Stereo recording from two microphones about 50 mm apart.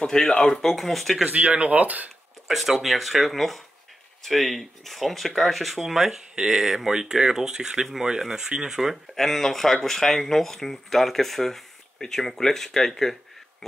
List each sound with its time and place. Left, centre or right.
0.0 s speech: centre
1.2 s speech: right
2.4 s speech: centre
9.1 s speech: centre